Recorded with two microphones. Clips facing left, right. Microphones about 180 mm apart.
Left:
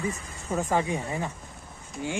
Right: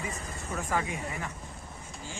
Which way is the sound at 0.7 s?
30° left (ahead or behind).